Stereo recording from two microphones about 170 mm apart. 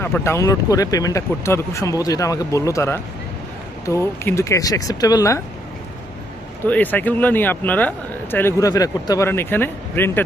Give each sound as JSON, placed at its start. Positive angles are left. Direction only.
{"t": 0.0, "sound": "speech", "side_deg": 15}
{"t": 6.7, "sound": "speech", "side_deg": 10}